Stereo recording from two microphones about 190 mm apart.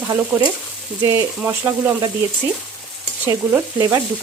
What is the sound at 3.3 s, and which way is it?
Frying, 15° right (ahead or behind).